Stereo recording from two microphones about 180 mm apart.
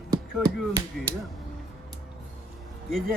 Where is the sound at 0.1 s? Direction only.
20° right (ahead or behind).